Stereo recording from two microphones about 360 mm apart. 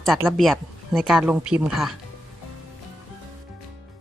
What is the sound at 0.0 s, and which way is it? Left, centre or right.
Speech, centre.